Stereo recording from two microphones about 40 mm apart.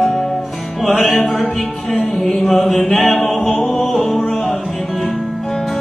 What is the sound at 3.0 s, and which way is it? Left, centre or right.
Music, left.